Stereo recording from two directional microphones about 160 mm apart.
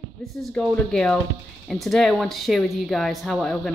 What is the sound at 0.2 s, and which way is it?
Speech, centre (ahead or behind).